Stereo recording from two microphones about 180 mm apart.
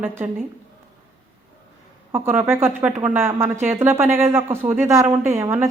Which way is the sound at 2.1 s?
10° right (ahead or behind).